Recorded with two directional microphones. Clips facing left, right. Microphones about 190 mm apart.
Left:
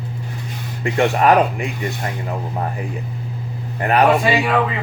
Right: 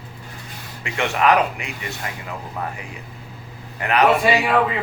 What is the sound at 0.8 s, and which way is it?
Speech, 35° left (ahead or behind).